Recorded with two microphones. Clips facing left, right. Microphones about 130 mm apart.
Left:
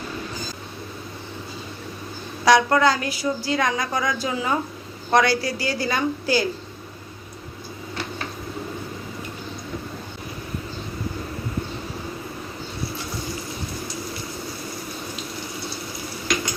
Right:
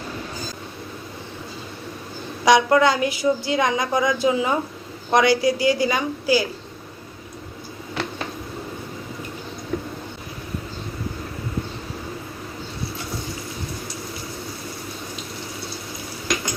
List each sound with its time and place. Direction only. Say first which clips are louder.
2.4 s a woman's voice: right 1 dB; 15° right (ahead or behind)